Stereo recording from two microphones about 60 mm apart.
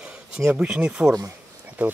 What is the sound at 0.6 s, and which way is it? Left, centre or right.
Speech, centre.